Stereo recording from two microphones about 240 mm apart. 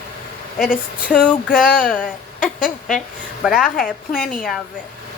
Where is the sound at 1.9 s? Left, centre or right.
Left.